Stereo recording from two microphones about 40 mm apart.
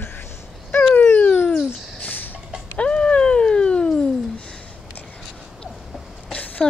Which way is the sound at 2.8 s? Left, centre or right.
Left.